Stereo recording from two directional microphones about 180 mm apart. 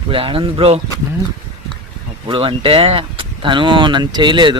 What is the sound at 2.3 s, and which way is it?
Speech, 30° right (ahead or behind).